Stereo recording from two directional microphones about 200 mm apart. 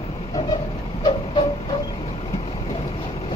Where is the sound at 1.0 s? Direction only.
25° left (ahead or behind).